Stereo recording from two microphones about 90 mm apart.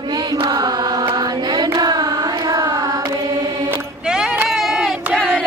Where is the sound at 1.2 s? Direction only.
50° right (ahead or behind).